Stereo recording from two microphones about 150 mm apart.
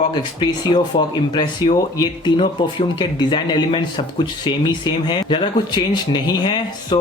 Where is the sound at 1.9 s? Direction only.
30° left (ahead or behind).